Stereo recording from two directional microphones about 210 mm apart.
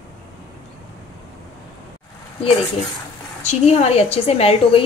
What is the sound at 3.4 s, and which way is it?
A woman's voice, 30° left (ahead or behind).